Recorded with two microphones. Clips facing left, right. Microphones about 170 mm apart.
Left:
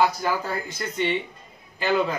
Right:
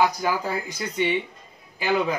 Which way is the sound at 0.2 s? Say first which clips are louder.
Right 1 dB; 15° right (ahead or behind).